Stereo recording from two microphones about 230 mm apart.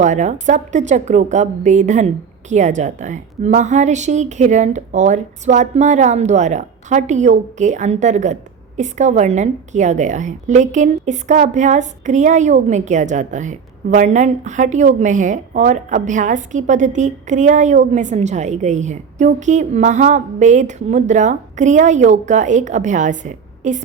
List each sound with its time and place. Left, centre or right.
0.0 s a woman's voice: right